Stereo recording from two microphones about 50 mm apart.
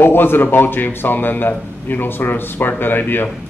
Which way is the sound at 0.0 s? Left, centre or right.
Left.